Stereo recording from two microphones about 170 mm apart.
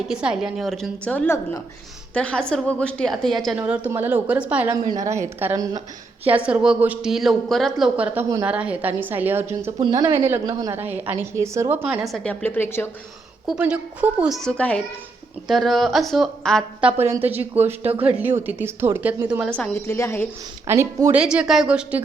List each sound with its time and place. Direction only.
0.1 s a woman's voice: 5° right (ahead or behind)
3.6 s a woman's voice: 10° right (ahead or behind); by 12.9 s 15° left (ahead or behind)
13.5 s a woman's voice: 5° right (ahead or behind)
16.8 s a woman's voice: 15° right (ahead or behind)
19.5 s a woman's voice: 10° left (ahead or behind)
20.7 s a woman's voice: 15° right (ahead or behind)